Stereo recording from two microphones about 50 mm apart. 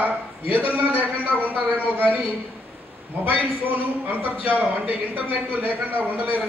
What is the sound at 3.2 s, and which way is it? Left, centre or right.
A man's voice, right.